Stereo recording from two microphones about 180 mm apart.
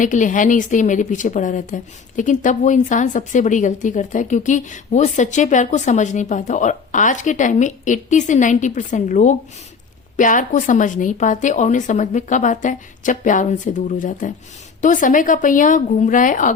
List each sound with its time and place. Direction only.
0.0 s speech: 45° left (ahead or behind)